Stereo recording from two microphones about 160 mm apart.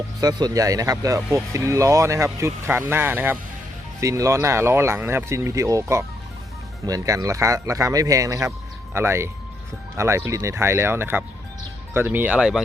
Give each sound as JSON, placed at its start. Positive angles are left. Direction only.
{"t": 0.2, "sound": "speech", "side_deg": -25}